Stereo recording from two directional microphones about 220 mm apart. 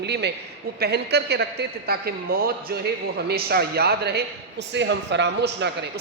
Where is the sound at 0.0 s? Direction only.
50° right (ahead or behind).